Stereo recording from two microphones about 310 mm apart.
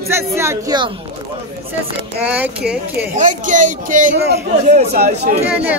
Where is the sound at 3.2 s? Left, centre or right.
Right.